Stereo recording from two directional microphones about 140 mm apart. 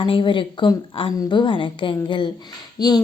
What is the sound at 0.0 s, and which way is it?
A woman's voice, 35° left (ahead or behind).